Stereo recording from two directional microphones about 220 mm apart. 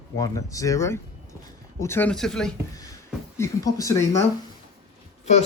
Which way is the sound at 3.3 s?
15° left (ahead or behind).